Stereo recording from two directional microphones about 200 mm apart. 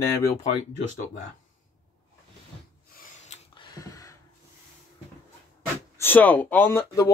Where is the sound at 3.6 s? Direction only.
15° left (ahead or behind).